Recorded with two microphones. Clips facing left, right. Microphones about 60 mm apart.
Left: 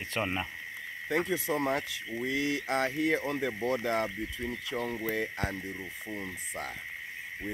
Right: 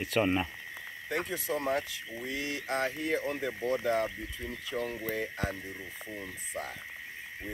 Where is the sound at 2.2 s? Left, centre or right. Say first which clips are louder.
Left 5 dB; left.